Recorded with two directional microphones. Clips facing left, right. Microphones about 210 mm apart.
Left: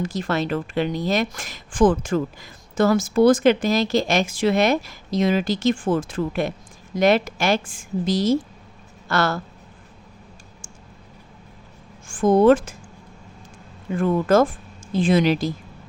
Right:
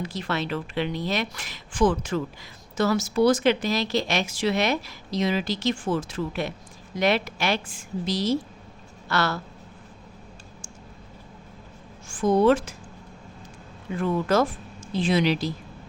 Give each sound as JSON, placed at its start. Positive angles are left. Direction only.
{"t": 0.0, "sound": "speech", "side_deg": 45}
{"t": 12.0, "sound": "speech", "side_deg": 50}
{"t": 13.9, "sound": "speech", "side_deg": 50}